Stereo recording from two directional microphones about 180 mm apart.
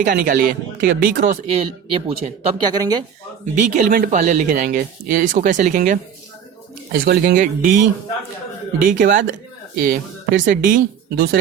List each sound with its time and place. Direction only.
0.0 s speech: 50° right (ahead or behind)
1.5 s speech: 30° right (ahead or behind)
3.5 s speech: 45° right (ahead or behind)
6.9 s speech: 55° right (ahead or behind)
8.8 s speech: 50° right (ahead or behind)